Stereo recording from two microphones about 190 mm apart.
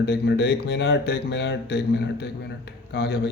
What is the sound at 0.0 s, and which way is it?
Speech, 60° left (ahead or behind).